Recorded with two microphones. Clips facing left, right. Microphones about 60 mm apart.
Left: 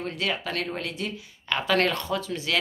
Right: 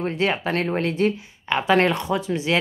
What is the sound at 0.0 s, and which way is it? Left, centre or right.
Speech, right.